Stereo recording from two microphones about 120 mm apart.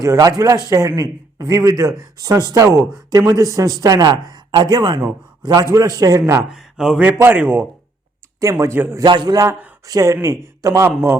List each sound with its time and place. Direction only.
0.0 s speech: 30° right (ahead or behind)
6.5 s speech: 5° right (ahead or behind)
8.4 s speech: 25° right (ahead or behind)
9.0 s speech: 40° right (ahead or behind); by 11.2 s 20° right (ahead or behind)